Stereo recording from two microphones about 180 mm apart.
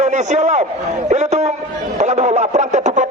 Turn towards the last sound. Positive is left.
turn(degrees=-40)  # may be behind; listen again after turning